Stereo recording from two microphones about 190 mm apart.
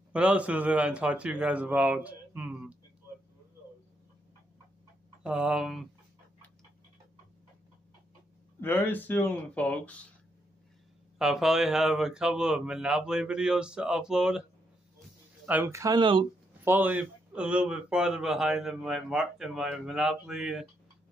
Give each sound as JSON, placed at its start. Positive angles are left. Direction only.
{"t": 0.1, "sound": "a man's voice", "side_deg": -5}
{"t": 5.2, "sound": "a man's voice", "side_deg": -5}
{"t": 8.5, "sound": "speech", "side_deg": 10}
{"t": 11.1, "sound": "a man's voice", "side_deg": 0}
{"t": 15.4, "sound": "a man's voice", "side_deg": -10}
{"t": 16.6, "sound": "a man's voice", "side_deg": -10}